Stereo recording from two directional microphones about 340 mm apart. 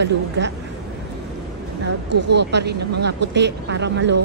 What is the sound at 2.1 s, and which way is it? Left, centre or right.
Speech, right.